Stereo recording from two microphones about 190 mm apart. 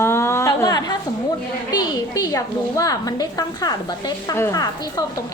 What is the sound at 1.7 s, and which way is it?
A woman's voice, 20° left (ahead or behind).